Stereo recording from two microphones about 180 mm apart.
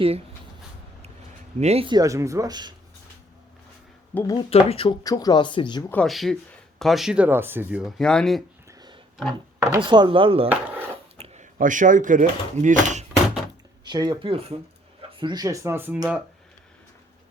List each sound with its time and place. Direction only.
1.5 s speech: 35° right (ahead or behind)
4.1 s speech: 15° left (ahead or behind)
4.4 s speech: 30° left (ahead or behind)
5.0 s speech: 20° left (ahead or behind)
5.9 s speech: 5° left (ahead or behind)
9.6 s speech: 20° right (ahead or behind)
11.2 s speech: 45° right (ahead or behind)
13.8 s speech: 25° right (ahead or behind); by 16.2 s 5° right (ahead or behind)